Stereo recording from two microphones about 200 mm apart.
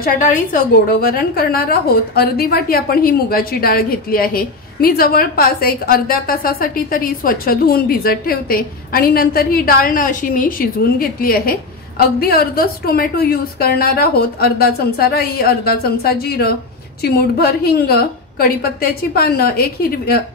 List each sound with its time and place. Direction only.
0.0 s a woman's voice: 40° left (ahead or behind)